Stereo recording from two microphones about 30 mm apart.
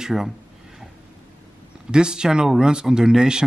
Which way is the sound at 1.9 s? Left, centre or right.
Right.